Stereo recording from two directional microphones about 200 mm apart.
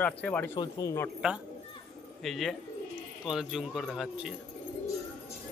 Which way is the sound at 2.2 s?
Centre (ahead or behind).